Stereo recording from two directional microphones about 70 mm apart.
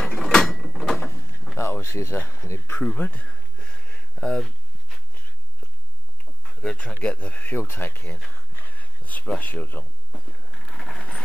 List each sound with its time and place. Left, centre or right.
0.1 s mechanisms: centre
1.6 s speech: left
2.4 s speech: left
2.8 s speech: centre
3.3 s a sound: centre
6.4 s speech: centre; by 8.2 s left
8.5 s a sound: left
9.4 s speech: left
10.1 s a sound: centre